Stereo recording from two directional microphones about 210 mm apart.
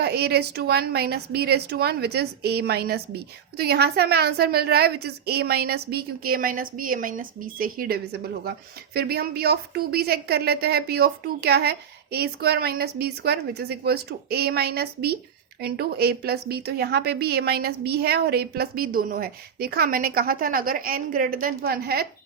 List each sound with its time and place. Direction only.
0.0 s a woman's voice: 50° right (ahead or behind)